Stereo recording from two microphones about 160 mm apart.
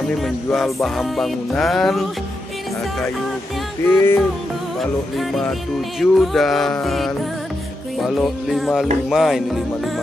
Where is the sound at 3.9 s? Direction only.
15° left (ahead or behind).